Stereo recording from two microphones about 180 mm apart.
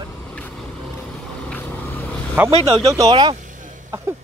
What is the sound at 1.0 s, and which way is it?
Vehicle, 5° left (ahead or behind).